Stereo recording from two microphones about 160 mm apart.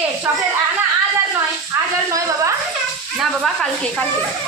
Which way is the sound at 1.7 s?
20° right (ahead or behind).